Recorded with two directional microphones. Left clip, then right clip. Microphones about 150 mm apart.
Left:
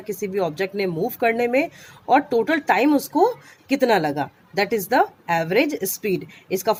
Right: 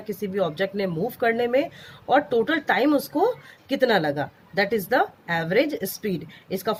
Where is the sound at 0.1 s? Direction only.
35° left (ahead or behind).